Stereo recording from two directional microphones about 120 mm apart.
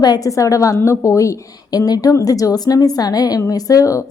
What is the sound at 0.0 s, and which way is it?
A woman's voice, 30° left (ahead or behind).